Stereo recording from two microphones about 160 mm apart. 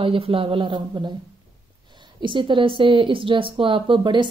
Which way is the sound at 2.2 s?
30° right (ahead or behind).